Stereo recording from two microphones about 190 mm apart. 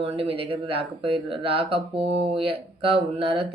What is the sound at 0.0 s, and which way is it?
Speech, 30° right (ahead or behind).